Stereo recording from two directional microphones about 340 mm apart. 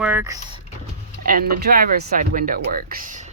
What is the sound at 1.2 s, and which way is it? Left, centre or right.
Speech, right.